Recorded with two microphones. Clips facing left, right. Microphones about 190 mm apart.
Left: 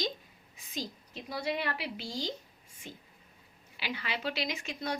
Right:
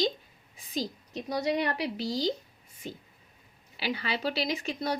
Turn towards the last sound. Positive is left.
turn(degrees=-35)  # may be behind; listen again after turning